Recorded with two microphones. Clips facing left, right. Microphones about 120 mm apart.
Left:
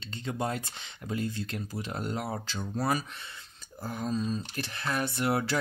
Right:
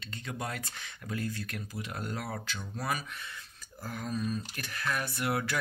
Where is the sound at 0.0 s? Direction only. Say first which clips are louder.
Left 5 dB; 25° left (ahead or behind).